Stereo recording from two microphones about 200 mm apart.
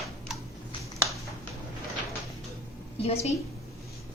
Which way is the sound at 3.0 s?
30° left (ahead or behind).